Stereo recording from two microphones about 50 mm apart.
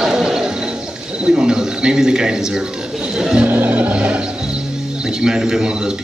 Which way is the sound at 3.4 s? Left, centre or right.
Right.